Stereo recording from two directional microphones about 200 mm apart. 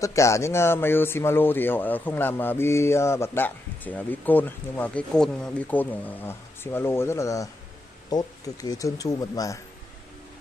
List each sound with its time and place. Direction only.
0.0 s speech: 15° left (ahead or behind)